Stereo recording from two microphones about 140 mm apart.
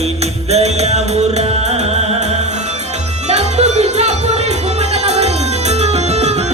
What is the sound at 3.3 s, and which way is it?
Music, 55° right (ahead or behind).